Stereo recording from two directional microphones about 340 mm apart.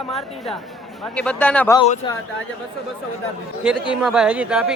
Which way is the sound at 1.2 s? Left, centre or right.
Centre.